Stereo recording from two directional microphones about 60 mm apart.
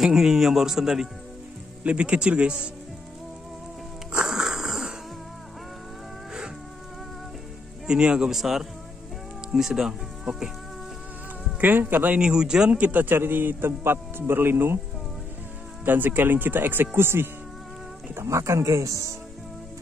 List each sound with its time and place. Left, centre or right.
0.0 s a man's voice: centre
1.8 s a man's voice: right
4.1 s wheeze: centre
7.8 s a man's voice: centre
11.6 s speech: right
12.2 s a man's voice: centre
12.7 s speech: right
13.1 s speech: right
15.8 s speech: right
18.1 s speech: right